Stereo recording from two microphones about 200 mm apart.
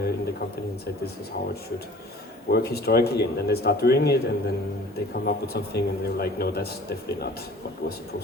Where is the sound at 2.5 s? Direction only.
50° left (ahead or behind).